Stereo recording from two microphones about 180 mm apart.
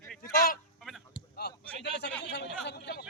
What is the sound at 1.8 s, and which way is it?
Speech, 70° left (ahead or behind).